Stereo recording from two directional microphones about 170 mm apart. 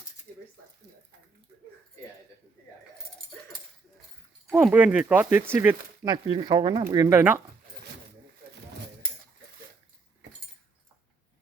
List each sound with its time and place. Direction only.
4.5 s speech: 10° right (ahead or behind)
6.1 s speech: 25° right (ahead or behind)